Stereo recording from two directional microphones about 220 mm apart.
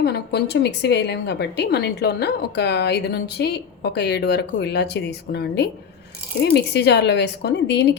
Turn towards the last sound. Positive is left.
turn(degrees=50)  # may be behind; listen again after turning